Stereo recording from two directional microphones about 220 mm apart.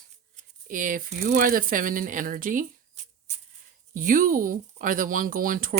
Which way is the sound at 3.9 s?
40° right (ahead or behind).